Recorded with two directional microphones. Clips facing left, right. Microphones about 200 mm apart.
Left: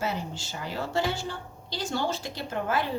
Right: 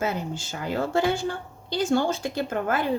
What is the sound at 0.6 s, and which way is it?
Speech, 50° right (ahead or behind).